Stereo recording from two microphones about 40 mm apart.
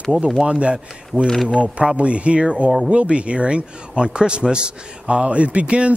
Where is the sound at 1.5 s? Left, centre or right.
Right.